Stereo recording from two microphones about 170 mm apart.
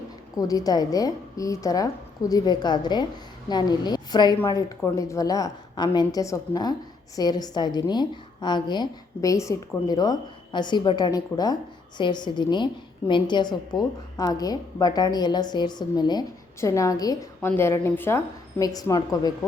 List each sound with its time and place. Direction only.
0.3 s a woman's voice: 20° left (ahead or behind)